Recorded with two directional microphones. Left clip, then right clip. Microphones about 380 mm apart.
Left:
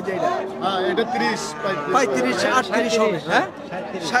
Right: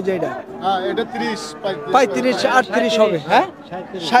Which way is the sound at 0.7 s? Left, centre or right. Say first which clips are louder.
Right 2 dB; right.